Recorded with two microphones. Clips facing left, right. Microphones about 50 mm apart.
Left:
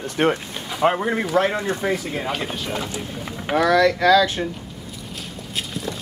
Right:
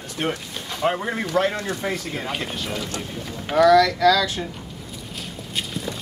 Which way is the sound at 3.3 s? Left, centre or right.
Centre.